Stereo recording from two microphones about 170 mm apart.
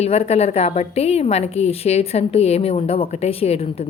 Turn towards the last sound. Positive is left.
turn(degrees=35)  # may be behind; listen again after turning